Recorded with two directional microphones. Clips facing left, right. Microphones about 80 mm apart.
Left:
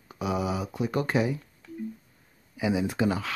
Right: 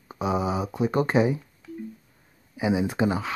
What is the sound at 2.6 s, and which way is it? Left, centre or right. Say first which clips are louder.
Speech: right 3 dB; right.